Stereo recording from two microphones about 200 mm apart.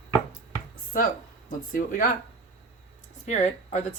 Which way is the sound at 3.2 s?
35° left (ahead or behind).